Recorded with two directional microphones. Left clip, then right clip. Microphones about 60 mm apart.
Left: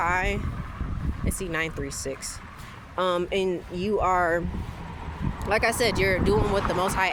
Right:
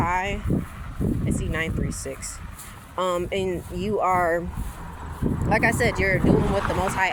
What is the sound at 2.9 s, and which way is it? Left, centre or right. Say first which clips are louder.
Speech: even; left.